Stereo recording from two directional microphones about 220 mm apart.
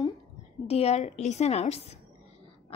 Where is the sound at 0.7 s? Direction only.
30° left (ahead or behind).